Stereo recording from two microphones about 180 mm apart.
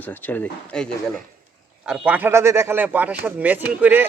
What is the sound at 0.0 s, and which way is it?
Speech, 10° left (ahead or behind).